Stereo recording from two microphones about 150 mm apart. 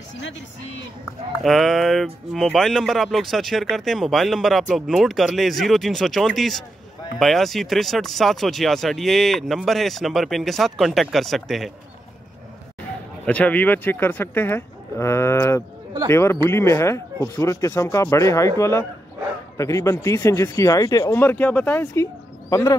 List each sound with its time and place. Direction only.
1.4 s speech: centre (ahead or behind)
13.2 s speech: 10° left (ahead or behind); by 22.8 s 25° left (ahead or behind)